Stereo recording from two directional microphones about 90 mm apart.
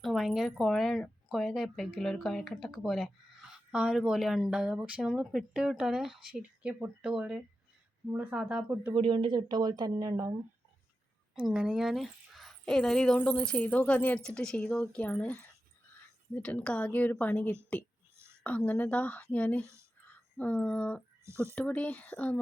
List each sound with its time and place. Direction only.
0.0 s speech: centre (ahead or behind); by 9.0 s 20° right (ahead or behind)
9.0 s speech: 65° right (ahead or behind); by 10.3 s 40° right (ahead or behind)
11.4 s speech: 10° right (ahead or behind); by 21.0 s 15° left (ahead or behind)
21.2 s speech: 30° right (ahead or behind)
21.5 s speech: 15° left (ahead or behind)